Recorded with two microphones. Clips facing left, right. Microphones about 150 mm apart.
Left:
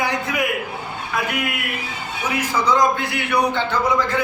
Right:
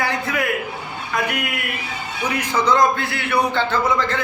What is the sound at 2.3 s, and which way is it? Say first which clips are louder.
A man's voice: right 1 dB; 10° left (ahead or behind).